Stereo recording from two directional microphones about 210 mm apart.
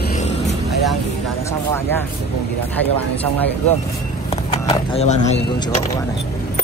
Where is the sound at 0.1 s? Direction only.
35° left (ahead or behind).